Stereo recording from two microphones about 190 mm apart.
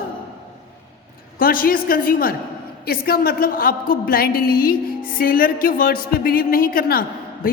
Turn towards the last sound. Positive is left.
turn(degrees=50)  # may be behind; listen again after turning